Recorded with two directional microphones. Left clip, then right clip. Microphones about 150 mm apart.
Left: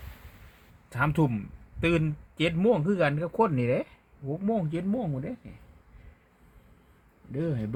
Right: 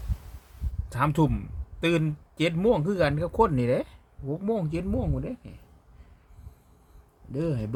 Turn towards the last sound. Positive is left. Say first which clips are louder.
# right 2 dB
turn(degrees=-15)  # may be behind; listen again after turning